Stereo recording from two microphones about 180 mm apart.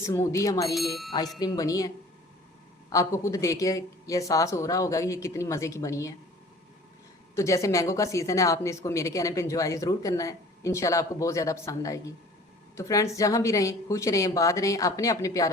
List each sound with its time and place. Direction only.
0.0 s speech: 15° left (ahead or behind)
0.7 s speech: centre (ahead or behind)
1.4 s speech: 20° left (ahead or behind)
2.9 s speech: 15° left (ahead or behind)
7.3 s speech: 15° left (ahead or behind)